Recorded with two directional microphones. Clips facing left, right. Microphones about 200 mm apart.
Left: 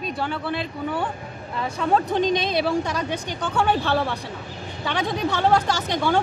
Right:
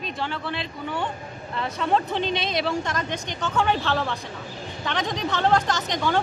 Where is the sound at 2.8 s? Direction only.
10° left (ahead or behind).